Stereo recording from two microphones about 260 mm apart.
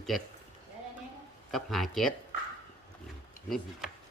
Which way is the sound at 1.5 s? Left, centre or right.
Centre.